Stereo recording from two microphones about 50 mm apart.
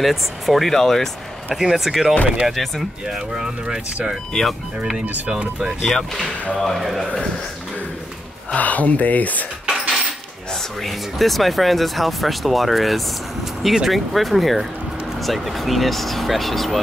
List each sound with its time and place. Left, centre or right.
0.0 s speech: centre
3.2 s speech: centre
4.3 s speech: centre
5.0 s speech: right
5.3 s speech: centre
5.9 s speech: centre
8.5 s speech: left
10.5 s speech: centre